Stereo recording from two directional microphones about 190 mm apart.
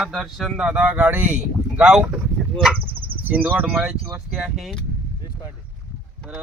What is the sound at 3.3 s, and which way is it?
Speech, 10° right (ahead or behind).